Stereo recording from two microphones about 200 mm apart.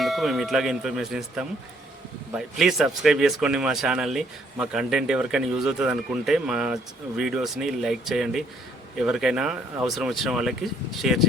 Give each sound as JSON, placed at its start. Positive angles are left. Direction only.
{"t": 0.0, "sound": "a man's voice", "side_deg": 0}